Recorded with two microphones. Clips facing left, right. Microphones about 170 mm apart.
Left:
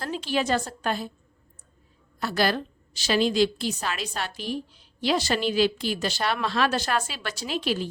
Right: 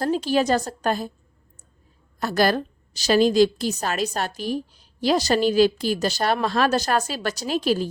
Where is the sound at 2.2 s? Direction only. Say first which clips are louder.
Right 4 dB; 45° right (ahead or behind).